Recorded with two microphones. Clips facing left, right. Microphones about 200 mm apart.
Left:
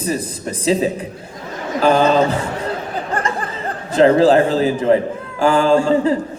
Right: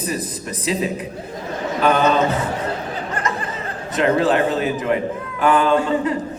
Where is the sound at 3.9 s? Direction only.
30° left (ahead or behind).